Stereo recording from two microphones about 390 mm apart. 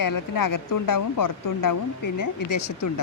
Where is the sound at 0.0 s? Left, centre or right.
Left.